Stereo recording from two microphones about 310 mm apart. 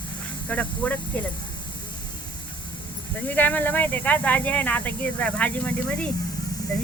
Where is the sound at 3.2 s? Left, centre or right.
Centre.